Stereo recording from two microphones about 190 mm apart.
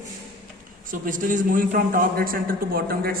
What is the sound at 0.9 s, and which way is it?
A man's voice, 45° right (ahead or behind).